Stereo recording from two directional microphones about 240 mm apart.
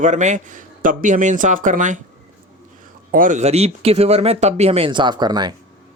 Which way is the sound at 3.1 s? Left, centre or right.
Right.